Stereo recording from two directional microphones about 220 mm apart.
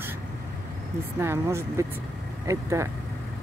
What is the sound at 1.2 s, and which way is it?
Speech, 10° right (ahead or behind).